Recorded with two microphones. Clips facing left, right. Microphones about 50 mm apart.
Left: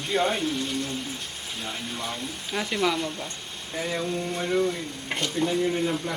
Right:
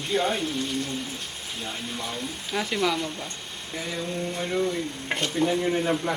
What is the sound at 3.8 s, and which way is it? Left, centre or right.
Mantra, left.